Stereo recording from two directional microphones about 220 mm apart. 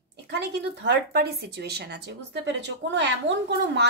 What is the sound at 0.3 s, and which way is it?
A woman's voice, 50° right (ahead or behind).